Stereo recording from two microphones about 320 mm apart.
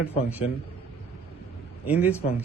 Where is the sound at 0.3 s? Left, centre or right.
Centre.